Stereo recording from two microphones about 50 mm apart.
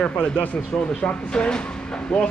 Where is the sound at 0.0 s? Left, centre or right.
Left.